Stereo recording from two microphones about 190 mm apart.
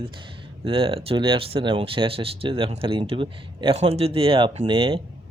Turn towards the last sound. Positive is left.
turn(degrees=-25)  # may be behind; listen again after turning